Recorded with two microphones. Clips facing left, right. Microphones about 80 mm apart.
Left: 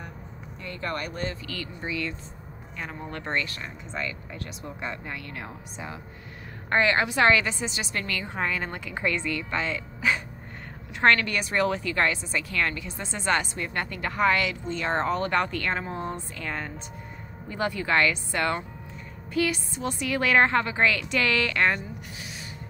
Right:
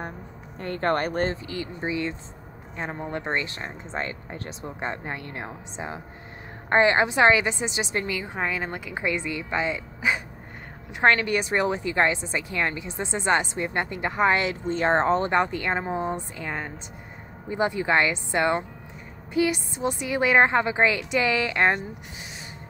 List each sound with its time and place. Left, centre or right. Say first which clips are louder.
0.6 s speech: right 8 dB; right
1.3 s a woman's voice: right 4 dB; right
8.2 s a woman's voice: right 1 dB; centre